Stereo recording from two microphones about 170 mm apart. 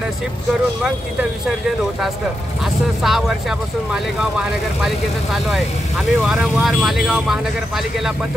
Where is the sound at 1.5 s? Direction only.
Centre (ahead or behind).